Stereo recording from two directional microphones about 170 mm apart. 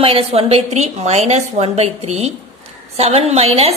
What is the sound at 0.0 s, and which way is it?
A woman's voice, 35° right (ahead or behind).